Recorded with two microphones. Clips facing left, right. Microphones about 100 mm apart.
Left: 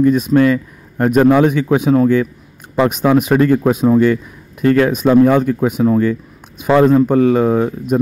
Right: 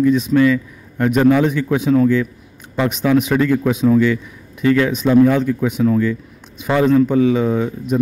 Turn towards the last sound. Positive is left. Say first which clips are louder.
# left 4 dB
turn(degrees=50)  # may be behind; listen again after turning